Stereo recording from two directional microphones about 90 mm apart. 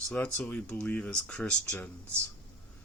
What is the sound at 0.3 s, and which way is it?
Speech, 15° left (ahead or behind).